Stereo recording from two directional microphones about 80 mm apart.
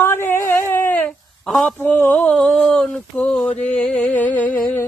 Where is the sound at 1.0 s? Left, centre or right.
Centre.